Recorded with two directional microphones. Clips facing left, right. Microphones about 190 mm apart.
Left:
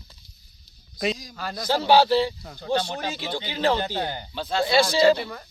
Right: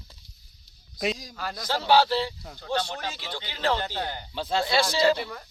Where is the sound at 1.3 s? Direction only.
5° right (ahead or behind).